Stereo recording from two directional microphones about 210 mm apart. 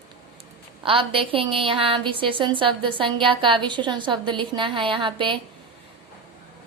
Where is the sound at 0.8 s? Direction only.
25° right (ahead or behind).